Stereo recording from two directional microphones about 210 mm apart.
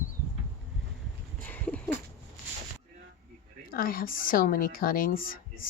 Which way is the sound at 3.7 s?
45° left (ahead or behind).